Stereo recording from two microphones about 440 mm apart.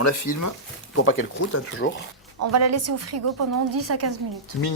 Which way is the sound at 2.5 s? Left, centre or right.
Right.